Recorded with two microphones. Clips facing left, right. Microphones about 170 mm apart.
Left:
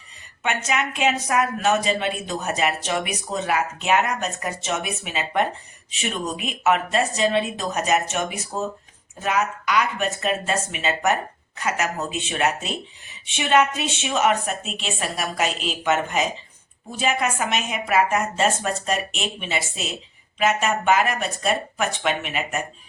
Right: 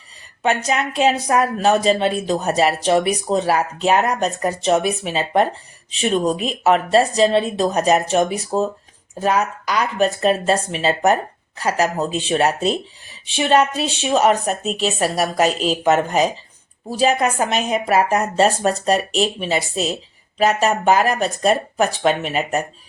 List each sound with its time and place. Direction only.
0.4 s speech: 35° right (ahead or behind)